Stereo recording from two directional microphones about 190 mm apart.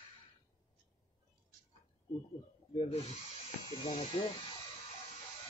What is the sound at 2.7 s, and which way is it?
Speech, 30° left (ahead or behind).